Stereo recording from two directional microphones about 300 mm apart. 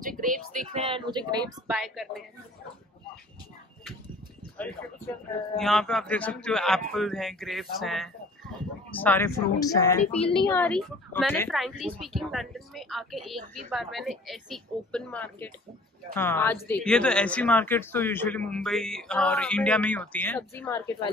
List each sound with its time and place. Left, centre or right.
0.2 s speech: right
1.7 s a woman's voice: centre
4.6 s a woman's voice: centre